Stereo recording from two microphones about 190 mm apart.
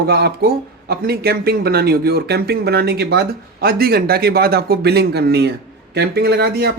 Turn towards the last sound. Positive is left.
turn(degrees=-60)  # may be behind; listen again after turning